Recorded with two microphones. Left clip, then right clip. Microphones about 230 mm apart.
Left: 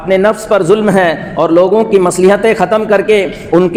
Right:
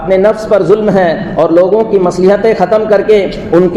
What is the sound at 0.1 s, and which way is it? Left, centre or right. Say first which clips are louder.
A man's voice: right 1 dB; left.